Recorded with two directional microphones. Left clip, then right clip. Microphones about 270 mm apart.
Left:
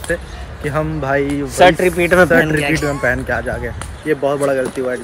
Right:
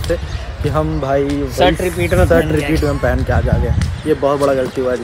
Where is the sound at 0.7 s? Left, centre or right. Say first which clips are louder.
Right 1 dB; centre.